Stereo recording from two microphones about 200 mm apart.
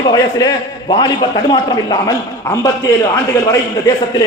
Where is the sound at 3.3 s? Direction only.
10° left (ahead or behind).